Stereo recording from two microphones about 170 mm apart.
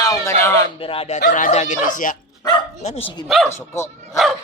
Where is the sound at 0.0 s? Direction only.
20° left (ahead or behind).